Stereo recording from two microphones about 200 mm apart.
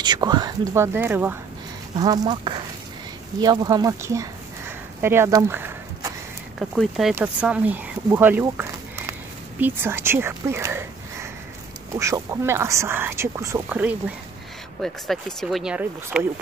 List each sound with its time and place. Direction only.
0.0 s speech: 20° right (ahead or behind)
12.0 s speech: 15° right (ahead or behind)